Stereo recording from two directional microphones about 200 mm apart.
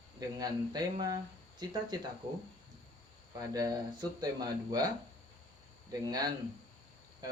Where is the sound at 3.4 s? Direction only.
20° right (ahead or behind).